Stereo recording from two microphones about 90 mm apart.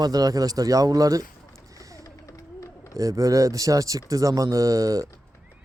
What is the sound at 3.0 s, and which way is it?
Speech, 40° right (ahead or behind).